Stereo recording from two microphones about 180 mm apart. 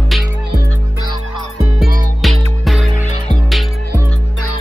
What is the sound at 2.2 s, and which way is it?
Music, centre (ahead or behind).